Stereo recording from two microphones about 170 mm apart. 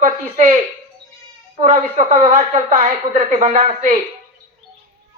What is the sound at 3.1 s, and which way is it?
Speech, 45° right (ahead or behind).